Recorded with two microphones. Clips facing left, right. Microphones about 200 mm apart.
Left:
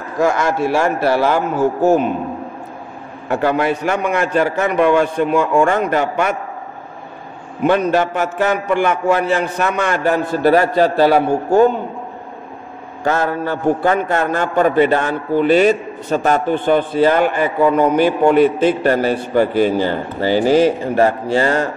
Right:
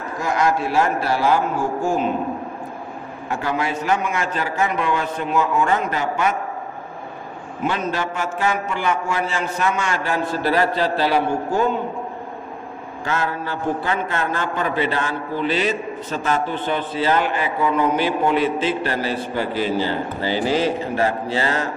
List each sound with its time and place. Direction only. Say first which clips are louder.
0.2 s a man's voice: left 5 dB; 75° left (ahead or behind)
3.3 s a man's voice: left 7 dB; 60° left (ahead or behind)
7.6 s a man's voice: left 9 dB; 55° left (ahead or behind)
13.0 s a man's voice: left 7 dB; 45° left (ahead or behind)